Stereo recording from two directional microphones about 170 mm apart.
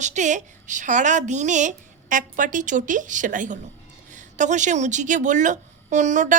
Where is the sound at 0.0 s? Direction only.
45° right (ahead or behind).